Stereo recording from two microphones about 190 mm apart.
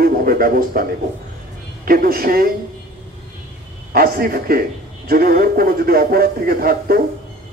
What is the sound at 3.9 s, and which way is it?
Speech, 50° right (ahead or behind).